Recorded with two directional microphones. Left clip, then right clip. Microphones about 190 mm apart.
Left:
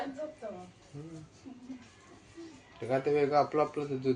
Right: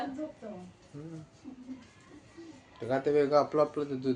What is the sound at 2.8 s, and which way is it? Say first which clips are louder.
Speech: right 1 dB; 15° right (ahead or behind).